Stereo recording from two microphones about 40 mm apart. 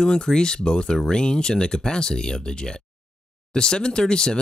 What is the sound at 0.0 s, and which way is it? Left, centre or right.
Speech, centre.